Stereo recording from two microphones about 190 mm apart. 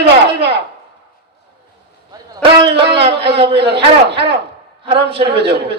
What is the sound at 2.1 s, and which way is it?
Music, 30° right (ahead or behind).